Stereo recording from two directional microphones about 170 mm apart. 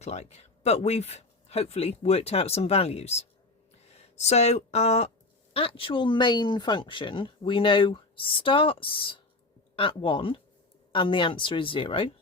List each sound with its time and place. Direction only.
0.0 s speech: 40° left (ahead or behind)